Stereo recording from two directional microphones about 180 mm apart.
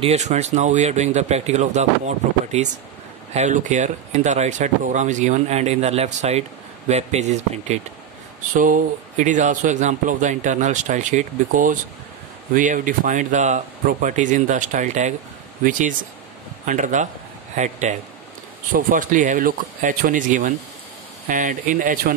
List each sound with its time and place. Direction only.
0.0 s speech: 40° right (ahead or behind)
16.6 s speech: 45° right (ahead or behind)